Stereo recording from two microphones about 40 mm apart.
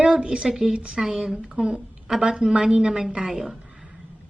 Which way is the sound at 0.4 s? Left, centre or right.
Centre.